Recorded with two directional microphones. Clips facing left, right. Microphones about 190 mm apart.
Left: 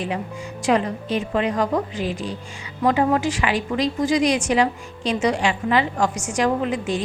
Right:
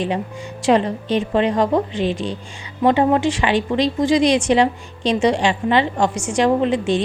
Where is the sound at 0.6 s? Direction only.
30° right (ahead or behind).